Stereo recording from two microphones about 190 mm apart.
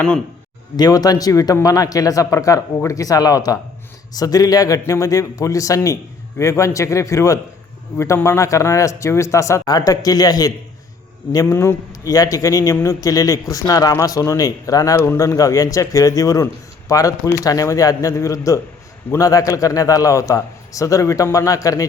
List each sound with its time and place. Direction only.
0.8 s a man's voice: 20° left (ahead or behind)